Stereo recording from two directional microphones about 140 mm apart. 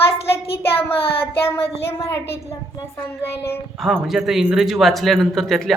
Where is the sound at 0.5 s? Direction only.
40° left (ahead or behind).